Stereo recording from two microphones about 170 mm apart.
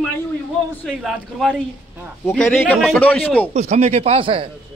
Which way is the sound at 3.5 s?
40° right (ahead or behind).